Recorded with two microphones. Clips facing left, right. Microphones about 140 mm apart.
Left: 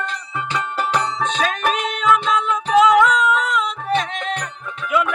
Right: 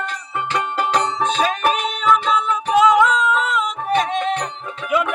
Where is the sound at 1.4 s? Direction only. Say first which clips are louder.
Right 2 dB; 5° right (ahead or behind).